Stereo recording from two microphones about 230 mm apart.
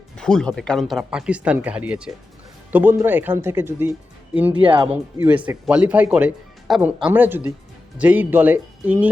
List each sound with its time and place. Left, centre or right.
0.2 s speech: centre
4.5 s speech: right
4.9 s speech: centre